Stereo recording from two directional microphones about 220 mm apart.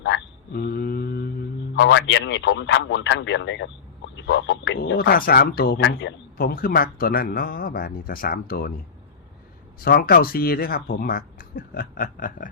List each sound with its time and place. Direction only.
0.0 s mantra: 50° left (ahead or behind)
1.7 s a man's voice: 55° left (ahead or behind)
9.8 s speech: 45° left (ahead or behind)